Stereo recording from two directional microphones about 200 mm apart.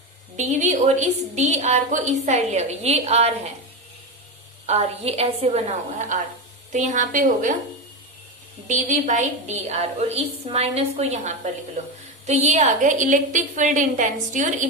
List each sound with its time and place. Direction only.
0.3 s a woman's voice: 35° right (ahead or behind)
4.6 s a woman's voice: 30° right (ahead or behind)
8.6 s a woman's voice: 40° right (ahead or behind)